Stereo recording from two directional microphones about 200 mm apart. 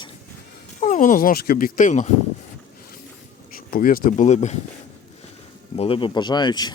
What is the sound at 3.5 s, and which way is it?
Speech, 45° left (ahead or behind).